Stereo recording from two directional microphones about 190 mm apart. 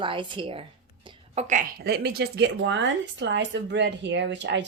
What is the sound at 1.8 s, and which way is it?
Speech, 55° right (ahead or behind).